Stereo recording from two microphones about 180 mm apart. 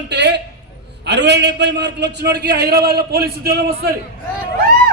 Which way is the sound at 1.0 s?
70° right (ahead or behind).